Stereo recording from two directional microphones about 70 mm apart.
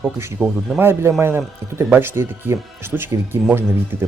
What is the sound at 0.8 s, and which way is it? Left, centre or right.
Speech, right.